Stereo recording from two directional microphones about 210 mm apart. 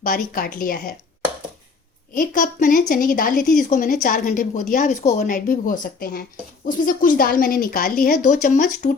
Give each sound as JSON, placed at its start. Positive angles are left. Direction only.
{"t": 0.0, "sound": "a woman's voice", "side_deg": 40}
{"t": 2.1, "sound": "a woman's voice", "side_deg": 40}